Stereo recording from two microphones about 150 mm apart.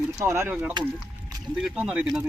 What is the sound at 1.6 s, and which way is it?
Speech, 5° right (ahead or behind).